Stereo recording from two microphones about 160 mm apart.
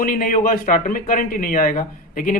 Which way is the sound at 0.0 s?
60° left (ahead or behind).